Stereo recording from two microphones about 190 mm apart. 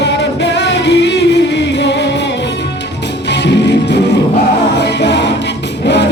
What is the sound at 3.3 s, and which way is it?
Music, 65° left (ahead or behind).